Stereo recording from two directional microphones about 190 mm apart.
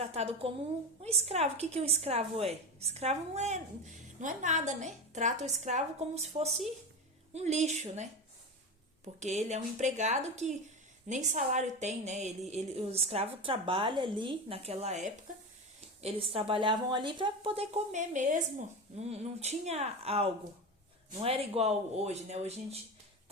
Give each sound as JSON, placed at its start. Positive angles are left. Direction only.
{"t": 0.0, "sound": "a woman's voice", "side_deg": -35}
{"t": 9.2, "sound": "a woman's voice", "side_deg": -40}